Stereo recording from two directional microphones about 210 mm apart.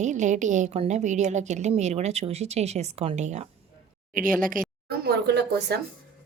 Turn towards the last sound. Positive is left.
turn(degrees=-55)  # may be behind; listen again after turning